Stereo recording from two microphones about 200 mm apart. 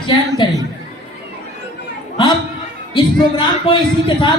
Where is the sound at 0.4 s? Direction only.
25° left (ahead or behind).